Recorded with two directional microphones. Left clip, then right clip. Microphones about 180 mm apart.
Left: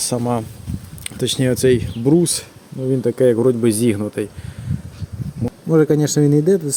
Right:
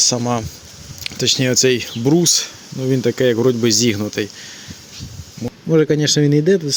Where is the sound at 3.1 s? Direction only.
10° right (ahead or behind).